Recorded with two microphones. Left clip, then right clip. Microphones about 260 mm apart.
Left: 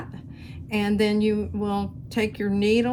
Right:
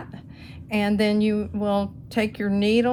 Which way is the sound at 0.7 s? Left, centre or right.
Right.